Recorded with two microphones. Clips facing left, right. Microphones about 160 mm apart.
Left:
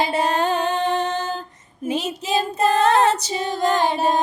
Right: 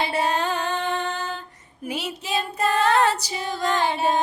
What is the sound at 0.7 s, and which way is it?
Female singing, 40° left (ahead or behind).